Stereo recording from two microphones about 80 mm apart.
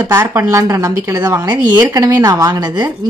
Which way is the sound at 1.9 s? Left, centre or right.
Right.